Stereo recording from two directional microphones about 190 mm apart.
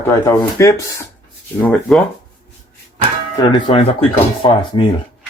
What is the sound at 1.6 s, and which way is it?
Speech, 5° left (ahead or behind).